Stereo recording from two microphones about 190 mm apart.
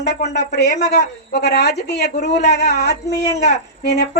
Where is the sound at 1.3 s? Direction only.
60° left (ahead or behind).